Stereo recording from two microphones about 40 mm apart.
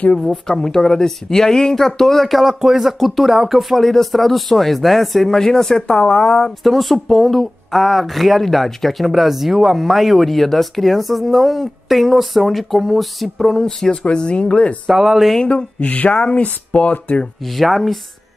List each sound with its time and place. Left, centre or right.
0.5 s speech: centre
6.6 s speech: centre
13.6 s speech: centre
14.0 s speech: left
14.9 s speech: centre
15.8 s speech: left
16.1 s speech: left
16.3 s speech: left
17.5 s speech: centre